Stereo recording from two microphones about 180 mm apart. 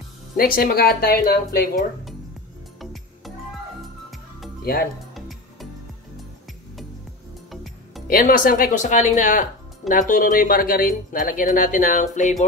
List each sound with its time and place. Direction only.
0.4 s speech: 55° left (ahead or behind)
2.8 s music: centre (ahead or behind)
4.7 s speech: 55° left (ahead or behind)
8.1 s speech: 50° left (ahead or behind)